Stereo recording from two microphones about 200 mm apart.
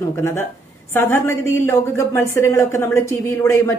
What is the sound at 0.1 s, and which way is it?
A woman's voice, 10° left (ahead or behind).